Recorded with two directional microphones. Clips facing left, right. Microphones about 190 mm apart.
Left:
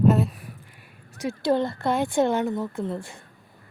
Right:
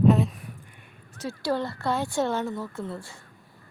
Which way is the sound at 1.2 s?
20° left (ahead or behind).